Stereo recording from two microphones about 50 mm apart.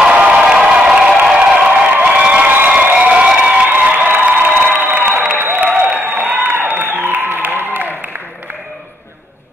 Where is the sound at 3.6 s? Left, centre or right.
Right.